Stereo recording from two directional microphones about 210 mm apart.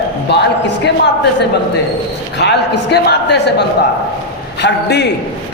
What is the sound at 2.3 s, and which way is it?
A man's voice, 55° left (ahead or behind).